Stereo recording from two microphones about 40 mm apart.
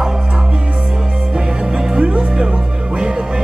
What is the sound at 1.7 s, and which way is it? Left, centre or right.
Music, centre.